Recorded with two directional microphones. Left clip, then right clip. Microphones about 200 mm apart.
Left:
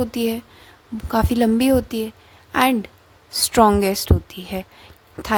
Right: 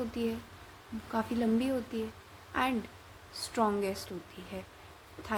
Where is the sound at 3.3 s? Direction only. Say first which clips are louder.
Left 16 dB; 60° left (ahead or behind).